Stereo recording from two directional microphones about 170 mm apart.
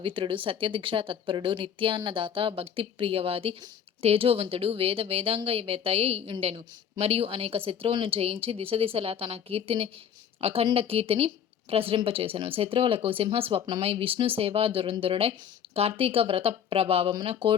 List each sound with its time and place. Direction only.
0.0 s speech: 30° right (ahead or behind)